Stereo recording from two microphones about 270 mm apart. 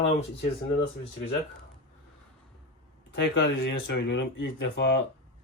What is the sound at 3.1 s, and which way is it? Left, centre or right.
Speech, left.